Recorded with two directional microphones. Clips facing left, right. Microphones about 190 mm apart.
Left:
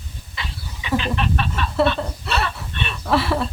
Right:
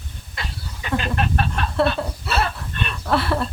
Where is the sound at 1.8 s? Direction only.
Centre (ahead or behind).